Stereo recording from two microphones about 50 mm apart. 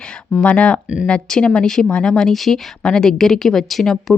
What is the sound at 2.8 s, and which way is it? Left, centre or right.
Speech, centre.